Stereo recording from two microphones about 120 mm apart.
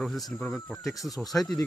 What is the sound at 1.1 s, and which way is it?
Speech, centre (ahead or behind).